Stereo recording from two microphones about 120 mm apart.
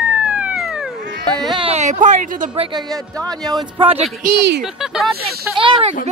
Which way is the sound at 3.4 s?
35° right (ahead or behind).